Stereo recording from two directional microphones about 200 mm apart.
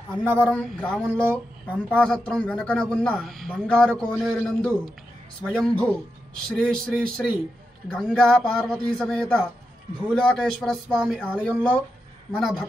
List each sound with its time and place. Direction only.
0.2 s speech: 5° left (ahead or behind)